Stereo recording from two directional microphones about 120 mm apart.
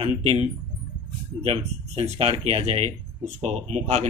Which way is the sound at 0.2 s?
60° right (ahead or behind).